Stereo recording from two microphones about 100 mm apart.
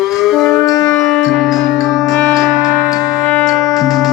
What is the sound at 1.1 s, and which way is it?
Music, 5° left (ahead or behind).